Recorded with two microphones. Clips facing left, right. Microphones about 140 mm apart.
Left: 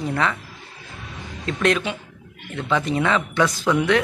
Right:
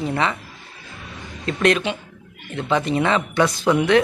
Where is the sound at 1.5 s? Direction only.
Centre (ahead or behind).